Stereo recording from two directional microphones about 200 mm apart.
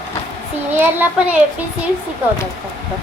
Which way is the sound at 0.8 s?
10° right (ahead or behind).